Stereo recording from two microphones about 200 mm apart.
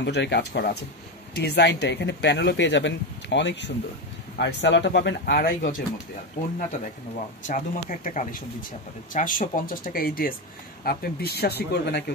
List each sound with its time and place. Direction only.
0.0 s speech: 60° left (ahead or behind)